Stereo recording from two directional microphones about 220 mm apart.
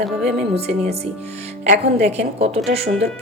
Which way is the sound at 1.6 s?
30° right (ahead or behind).